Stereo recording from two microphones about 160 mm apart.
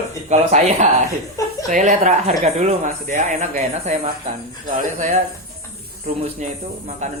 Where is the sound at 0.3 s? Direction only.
50° right (ahead or behind).